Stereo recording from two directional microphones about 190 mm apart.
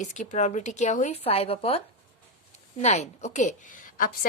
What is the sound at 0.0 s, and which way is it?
Speech, 40° left (ahead or behind).